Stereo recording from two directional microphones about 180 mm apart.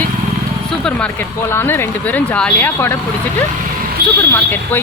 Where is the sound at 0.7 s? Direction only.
5° left (ahead or behind).